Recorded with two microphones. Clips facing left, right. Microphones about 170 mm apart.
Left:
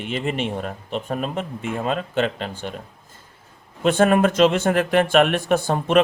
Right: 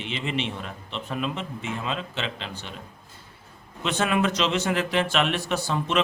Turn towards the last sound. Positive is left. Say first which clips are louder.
# left 7 dB
turn(degrees=50)  # may be behind; listen again after turning